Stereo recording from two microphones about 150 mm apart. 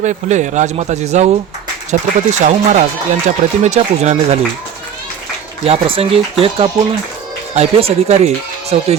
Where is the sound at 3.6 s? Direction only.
50° right (ahead or behind).